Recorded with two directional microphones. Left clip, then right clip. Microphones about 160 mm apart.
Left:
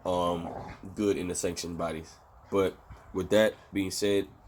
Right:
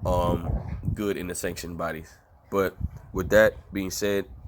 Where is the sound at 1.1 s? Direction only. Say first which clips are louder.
Even; 30° right (ahead or behind).